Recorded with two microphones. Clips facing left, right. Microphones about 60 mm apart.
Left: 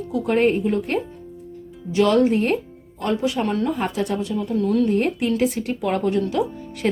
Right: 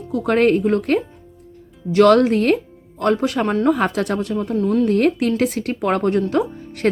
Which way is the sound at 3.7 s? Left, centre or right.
Right.